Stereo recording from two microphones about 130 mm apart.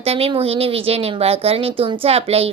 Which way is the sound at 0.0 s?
50° right (ahead or behind).